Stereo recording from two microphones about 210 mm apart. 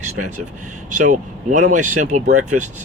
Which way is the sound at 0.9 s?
35° right (ahead or behind).